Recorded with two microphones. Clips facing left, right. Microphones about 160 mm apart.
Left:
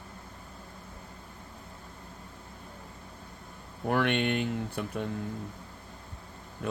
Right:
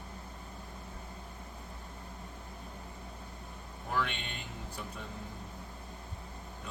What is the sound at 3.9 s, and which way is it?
Speech, 65° left (ahead or behind).